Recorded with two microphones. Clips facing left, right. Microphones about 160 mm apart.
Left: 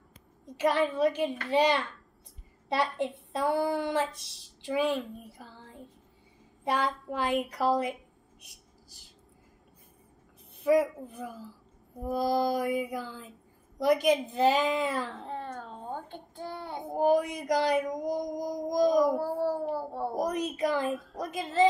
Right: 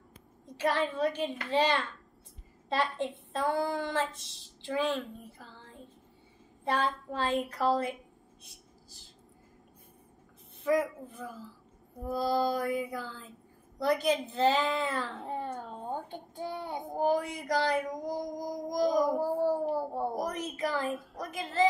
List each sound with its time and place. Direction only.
0.6 s speech: 15° left (ahead or behind)
8.4 s vehicle: 15° left (ahead or behind)
10.6 s speech: 20° left (ahead or behind)
15.2 s a sound: 10° right (ahead or behind)
16.9 s speech: 15° left (ahead or behind)
19.1 s a sound: 10° right (ahead or behind)
20.2 s a woman's voice: 15° left (ahead or behind)